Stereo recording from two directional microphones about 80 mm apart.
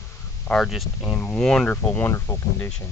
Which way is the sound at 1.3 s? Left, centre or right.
Centre.